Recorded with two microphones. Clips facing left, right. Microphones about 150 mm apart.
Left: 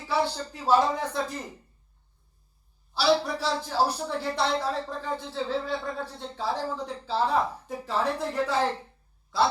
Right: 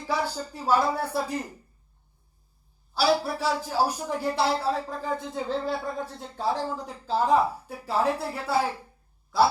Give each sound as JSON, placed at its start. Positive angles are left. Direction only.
{"t": 0.2, "sound": "a woman's voice", "side_deg": -10}
{"t": 2.9, "sound": "a woman's voice", "side_deg": -10}